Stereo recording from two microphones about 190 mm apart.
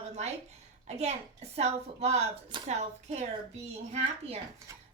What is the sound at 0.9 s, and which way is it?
A woman's voice, 35° right (ahead or behind).